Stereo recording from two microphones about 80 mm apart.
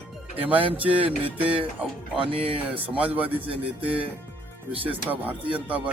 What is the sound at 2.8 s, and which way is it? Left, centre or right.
Speech, centre.